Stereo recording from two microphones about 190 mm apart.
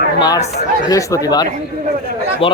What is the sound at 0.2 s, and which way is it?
Speech, 20° left (ahead or behind).